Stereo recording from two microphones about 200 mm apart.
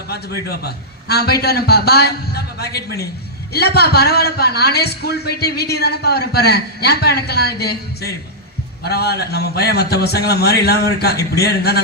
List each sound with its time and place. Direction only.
0.1 s a man's voice: 50° left (ahead or behind)